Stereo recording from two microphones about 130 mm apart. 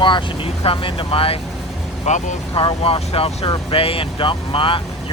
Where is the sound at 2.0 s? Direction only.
65° left (ahead or behind).